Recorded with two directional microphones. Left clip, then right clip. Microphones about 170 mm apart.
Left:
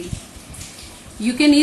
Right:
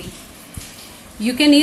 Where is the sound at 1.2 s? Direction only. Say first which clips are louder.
Right 1 dB; 50° right (ahead or behind).